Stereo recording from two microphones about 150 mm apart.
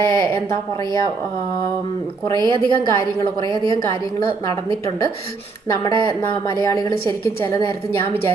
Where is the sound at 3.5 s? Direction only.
35° right (ahead or behind).